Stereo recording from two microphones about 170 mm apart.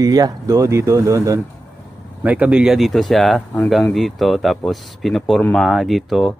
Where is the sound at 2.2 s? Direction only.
10° right (ahead or behind).